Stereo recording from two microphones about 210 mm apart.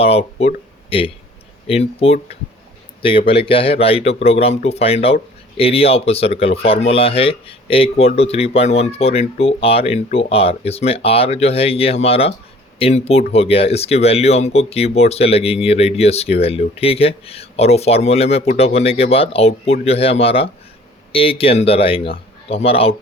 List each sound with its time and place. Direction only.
0.0 s speech: 30° left (ahead or behind)